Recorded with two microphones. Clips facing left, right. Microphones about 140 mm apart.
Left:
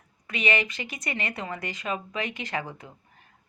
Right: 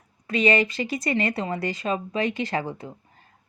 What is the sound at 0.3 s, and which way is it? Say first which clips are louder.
Speech: right 7 dB; 35° right (ahead or behind).